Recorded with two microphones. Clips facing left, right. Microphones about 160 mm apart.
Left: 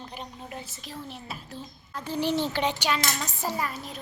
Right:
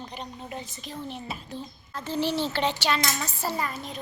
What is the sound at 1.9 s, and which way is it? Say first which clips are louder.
Speech: even; 10° left (ahead or behind).